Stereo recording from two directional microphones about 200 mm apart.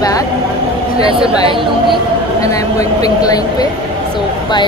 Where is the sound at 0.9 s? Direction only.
25° right (ahead or behind).